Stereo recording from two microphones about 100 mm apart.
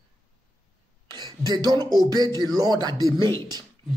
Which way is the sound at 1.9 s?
40° right (ahead or behind).